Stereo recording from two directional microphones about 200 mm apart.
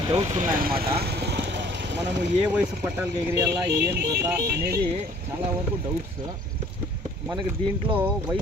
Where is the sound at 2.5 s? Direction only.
10° right (ahead or behind).